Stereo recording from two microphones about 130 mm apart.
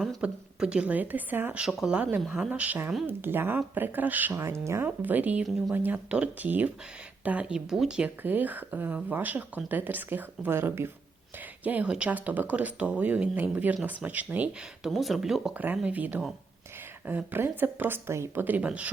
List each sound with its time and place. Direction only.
0.2 s speech: 10° right (ahead or behind)
14.8 s speech: centre (ahead or behind)